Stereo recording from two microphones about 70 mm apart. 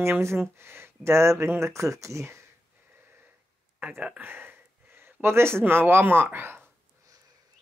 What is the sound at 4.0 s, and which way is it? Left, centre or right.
Speech, right.